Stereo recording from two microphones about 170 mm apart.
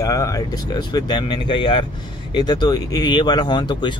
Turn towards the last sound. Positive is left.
turn(degrees=25)  # may be behind; listen again after turning